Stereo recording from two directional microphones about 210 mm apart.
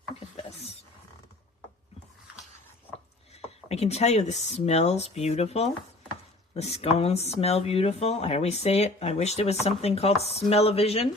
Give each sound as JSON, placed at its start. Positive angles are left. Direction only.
{"t": 3.4, "sound": "speech", "side_deg": 30}